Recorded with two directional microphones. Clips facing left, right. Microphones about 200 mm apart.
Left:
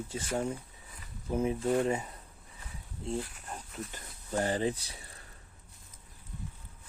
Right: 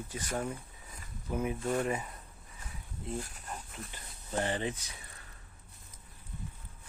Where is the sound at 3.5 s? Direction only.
40° left (ahead or behind).